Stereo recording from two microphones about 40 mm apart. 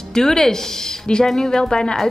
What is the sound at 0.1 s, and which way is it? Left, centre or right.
Speech, centre.